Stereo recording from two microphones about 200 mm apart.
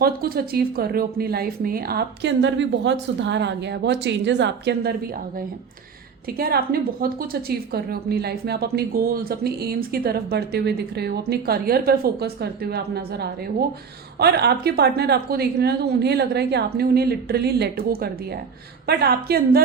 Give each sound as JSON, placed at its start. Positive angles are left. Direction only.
{"t": 0.0, "sound": "a woman's voice", "side_deg": -50}
{"t": 6.2, "sound": "a woman's voice", "side_deg": -50}